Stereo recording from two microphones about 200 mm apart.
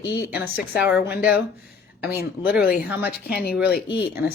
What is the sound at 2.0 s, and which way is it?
A woman's voice, 50° left (ahead or behind).